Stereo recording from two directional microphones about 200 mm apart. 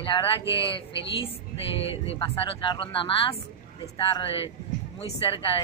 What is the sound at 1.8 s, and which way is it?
Speech, 30° left (ahead or behind).